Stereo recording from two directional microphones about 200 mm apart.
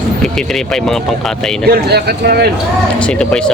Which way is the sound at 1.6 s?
55° right (ahead or behind).